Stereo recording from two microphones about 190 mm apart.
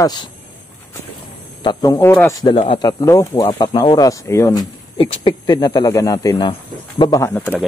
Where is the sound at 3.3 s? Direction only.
30° left (ahead or behind).